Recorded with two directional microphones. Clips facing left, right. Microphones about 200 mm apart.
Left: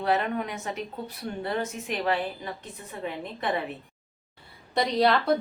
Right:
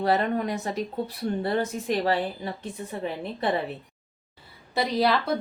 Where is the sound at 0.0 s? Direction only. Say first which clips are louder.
Right 3 dB; 35° right (ahead or behind).